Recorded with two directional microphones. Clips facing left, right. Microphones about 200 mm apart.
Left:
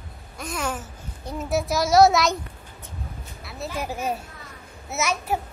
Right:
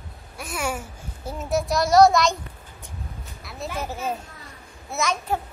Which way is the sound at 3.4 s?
Centre (ahead or behind).